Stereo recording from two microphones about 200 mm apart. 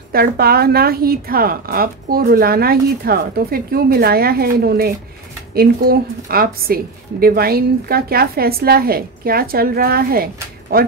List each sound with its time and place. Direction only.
0.1 s a woman's voice: 50° right (ahead or behind)